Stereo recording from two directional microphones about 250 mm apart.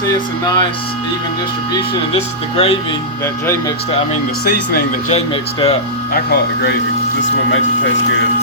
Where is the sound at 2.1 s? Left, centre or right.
Left.